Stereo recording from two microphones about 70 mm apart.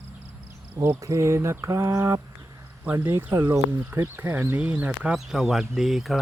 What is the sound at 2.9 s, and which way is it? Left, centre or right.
Speech, right.